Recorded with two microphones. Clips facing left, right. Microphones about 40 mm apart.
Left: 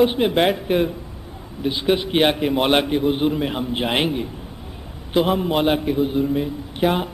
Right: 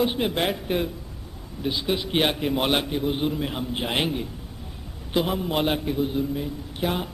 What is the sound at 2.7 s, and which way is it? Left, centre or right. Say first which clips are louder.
Speech: left 6 dB; left.